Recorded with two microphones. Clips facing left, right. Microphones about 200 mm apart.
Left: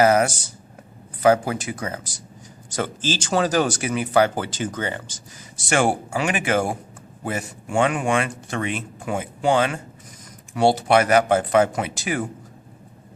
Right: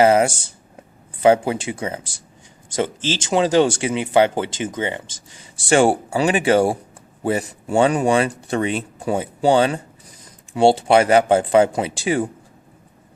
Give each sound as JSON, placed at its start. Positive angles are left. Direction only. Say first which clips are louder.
{"t": 0.0, "sound": "speech", "louder": "right 3 dB", "side_deg": -25}